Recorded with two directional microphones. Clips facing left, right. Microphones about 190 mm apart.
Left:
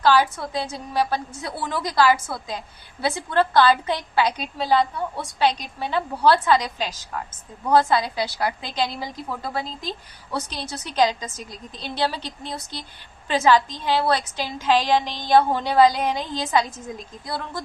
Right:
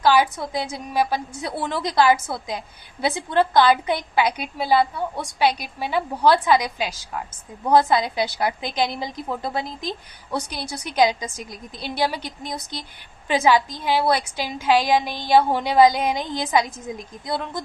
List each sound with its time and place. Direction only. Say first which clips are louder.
0.0 s a woman's voice: right 1 dB; 15° right (ahead or behind)